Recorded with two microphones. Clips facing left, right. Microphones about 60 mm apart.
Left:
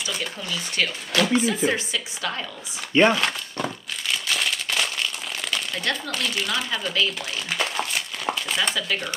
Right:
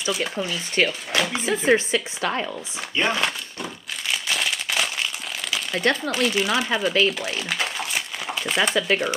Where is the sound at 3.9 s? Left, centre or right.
Centre.